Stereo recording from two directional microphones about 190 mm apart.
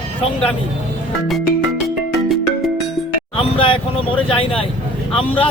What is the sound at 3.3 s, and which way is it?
A man's voice, 30° left (ahead or behind).